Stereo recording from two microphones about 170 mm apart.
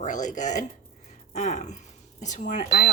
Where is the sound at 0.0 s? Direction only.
45° left (ahead or behind).